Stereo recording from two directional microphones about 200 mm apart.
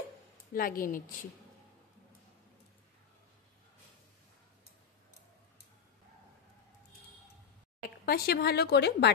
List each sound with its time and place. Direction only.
0.5 s a woman's voice: 45° left (ahead or behind)
8.0 s a woman's voice: 50° left (ahead or behind)